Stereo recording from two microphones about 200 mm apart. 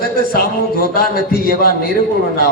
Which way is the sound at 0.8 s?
50° left (ahead or behind).